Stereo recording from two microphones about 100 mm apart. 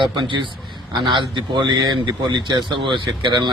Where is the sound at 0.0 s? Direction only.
50° right (ahead or behind).